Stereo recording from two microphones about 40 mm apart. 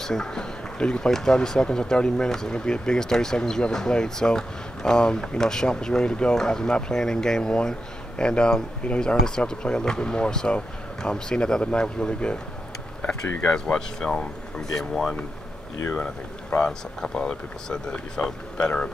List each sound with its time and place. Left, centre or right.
0.0 s speech: centre
13.7 s speech: centre
15.9 s speech: left
17.0 s speech: centre